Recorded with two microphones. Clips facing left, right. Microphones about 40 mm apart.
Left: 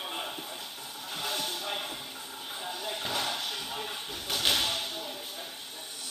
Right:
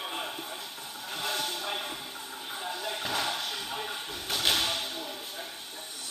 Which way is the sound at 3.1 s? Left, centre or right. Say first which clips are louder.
Right 1 dB; right.